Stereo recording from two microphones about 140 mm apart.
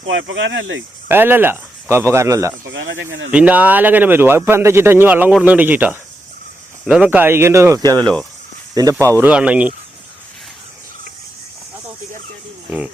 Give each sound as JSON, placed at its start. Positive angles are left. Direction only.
{"t": 1.0, "sound": "speech", "side_deg": -15}
{"t": 3.3, "sound": "speech", "side_deg": -10}
{"t": 8.0, "sound": "speech", "side_deg": 5}
{"t": 8.7, "sound": "speech", "side_deg": -25}
{"t": 9.3, "sound": "speech", "side_deg": -10}